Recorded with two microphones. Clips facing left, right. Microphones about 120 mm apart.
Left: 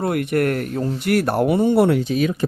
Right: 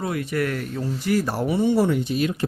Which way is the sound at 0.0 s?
60° left (ahead or behind).